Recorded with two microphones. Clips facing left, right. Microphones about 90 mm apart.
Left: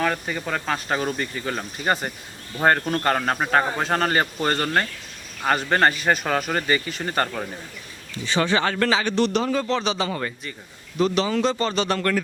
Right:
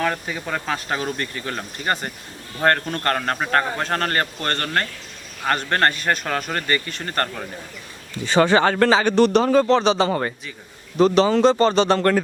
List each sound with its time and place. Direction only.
0.0 s a man's voice: centre (ahead or behind)
8.3 s speech: 40° right (ahead or behind)